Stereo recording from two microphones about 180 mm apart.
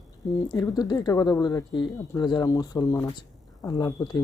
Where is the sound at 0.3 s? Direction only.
20° left (ahead or behind).